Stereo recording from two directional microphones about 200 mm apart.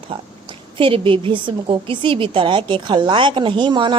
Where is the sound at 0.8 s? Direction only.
25° right (ahead or behind).